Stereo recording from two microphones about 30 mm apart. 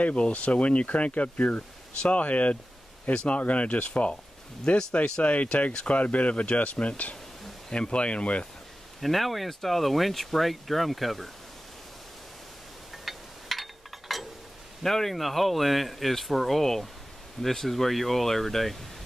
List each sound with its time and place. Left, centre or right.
0.3 s speech: left
4.7 s speech: left
5.2 s speech: left
5.7 s speech: left
5.9 s speech: left
7.7 s speech: left
9.0 s speech: centre
13.0 s a sound: centre
14.8 s speech: centre